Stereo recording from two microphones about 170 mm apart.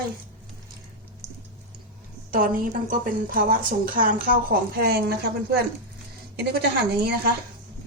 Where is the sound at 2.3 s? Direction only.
55° right (ahead or behind); by 5.3 s 70° right (ahead or behind).